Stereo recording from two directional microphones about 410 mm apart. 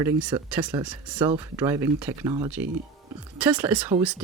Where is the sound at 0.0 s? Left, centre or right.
Centre.